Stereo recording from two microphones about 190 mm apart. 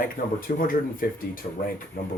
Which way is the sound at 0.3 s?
45° left (ahead or behind).